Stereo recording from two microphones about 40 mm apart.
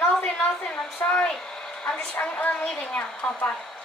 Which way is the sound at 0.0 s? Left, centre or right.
Left.